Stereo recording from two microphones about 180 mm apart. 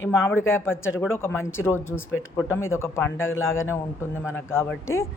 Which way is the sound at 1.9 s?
90° left.